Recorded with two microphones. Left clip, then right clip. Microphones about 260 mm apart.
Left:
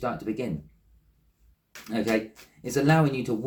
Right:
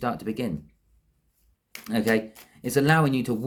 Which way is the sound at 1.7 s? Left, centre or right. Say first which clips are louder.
Right 2 dB; right.